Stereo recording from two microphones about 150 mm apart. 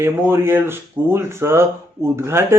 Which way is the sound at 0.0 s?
15° right (ahead or behind).